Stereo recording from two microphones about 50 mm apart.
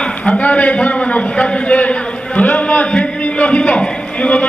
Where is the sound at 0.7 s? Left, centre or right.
Centre.